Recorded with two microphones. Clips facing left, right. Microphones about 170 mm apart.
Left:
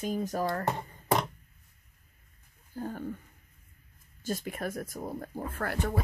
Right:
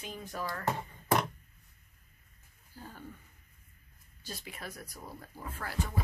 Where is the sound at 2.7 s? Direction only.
50° left (ahead or behind).